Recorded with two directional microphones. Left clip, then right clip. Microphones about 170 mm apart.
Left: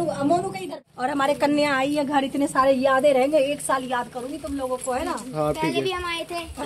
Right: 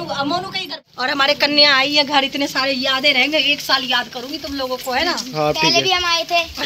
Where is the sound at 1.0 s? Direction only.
25° left (ahead or behind).